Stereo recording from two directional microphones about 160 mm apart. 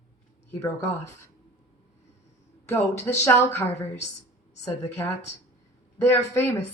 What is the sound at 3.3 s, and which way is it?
Speech, 15° left (ahead or behind).